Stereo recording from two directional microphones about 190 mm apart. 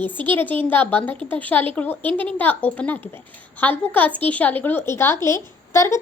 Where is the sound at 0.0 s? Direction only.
10° left (ahead or behind).